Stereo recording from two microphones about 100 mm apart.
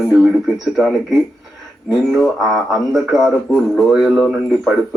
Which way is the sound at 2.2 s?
Centre (ahead or behind).